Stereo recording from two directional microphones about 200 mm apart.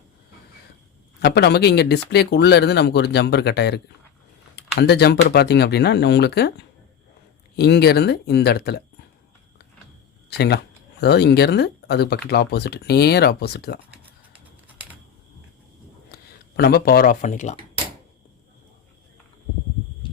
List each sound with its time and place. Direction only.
1.2 s speech: 55° left (ahead or behind)
7.5 s speech: 55° left (ahead or behind)
10.2 s speech: 55° left (ahead or behind)
16.1 s speech: 55° left (ahead or behind); by 17.6 s 35° left (ahead or behind)